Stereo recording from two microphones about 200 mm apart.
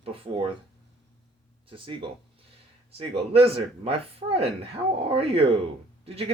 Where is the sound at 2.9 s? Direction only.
30° right (ahead or behind).